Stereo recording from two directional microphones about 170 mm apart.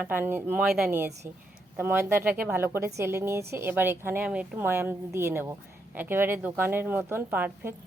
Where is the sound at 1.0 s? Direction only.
15° right (ahead or behind).